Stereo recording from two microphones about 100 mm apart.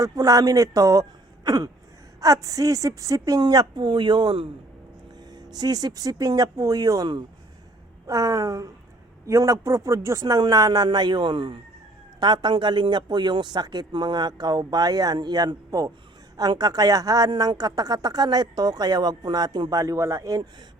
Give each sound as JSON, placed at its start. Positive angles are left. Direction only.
{"t": 0.0, "sound": "a woman's voice", "side_deg": -35}
{"t": 3.4, "sound": "speech", "side_deg": -45}
{"t": 5.5, "sound": "a woman's voice", "side_deg": -40}
{"t": 19.8, "sound": "a woman's voice", "side_deg": -30}